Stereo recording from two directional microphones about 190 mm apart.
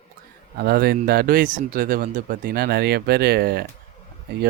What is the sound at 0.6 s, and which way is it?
Speech, 55° right (ahead or behind).